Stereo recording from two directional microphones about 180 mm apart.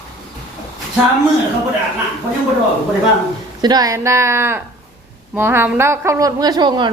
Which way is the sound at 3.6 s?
20° right (ahead or behind).